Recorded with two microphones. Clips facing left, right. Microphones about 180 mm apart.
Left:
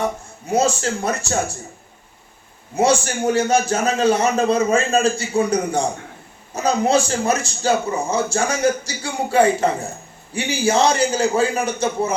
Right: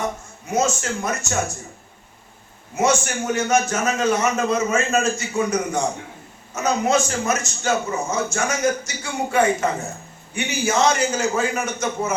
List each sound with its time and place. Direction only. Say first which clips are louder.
0.5 s a man's voice: left 3 dB; 30° left (ahead or behind)
2.7 s a man's voice: left 3 dB; 30° left (ahead or behind)